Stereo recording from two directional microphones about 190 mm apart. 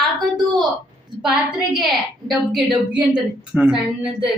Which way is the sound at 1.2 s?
5° right (ahead or behind).